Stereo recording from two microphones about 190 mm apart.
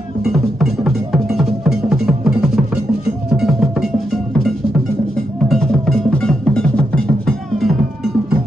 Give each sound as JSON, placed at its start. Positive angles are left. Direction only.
{"t": 0.2, "sound": "music", "side_deg": 0}